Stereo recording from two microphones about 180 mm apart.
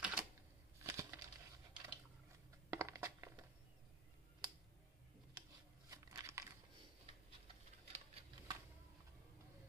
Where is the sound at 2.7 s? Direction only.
15° right (ahead or behind).